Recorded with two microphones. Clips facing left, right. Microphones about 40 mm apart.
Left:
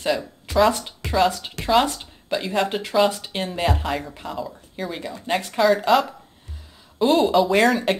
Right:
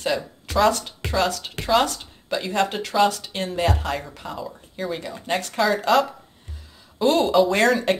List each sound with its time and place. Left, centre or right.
0.0 s speech: centre
0.7 s speech: centre
1.6 s a woman's voice: centre
3.1 s speech: centre
3.4 s speech: centre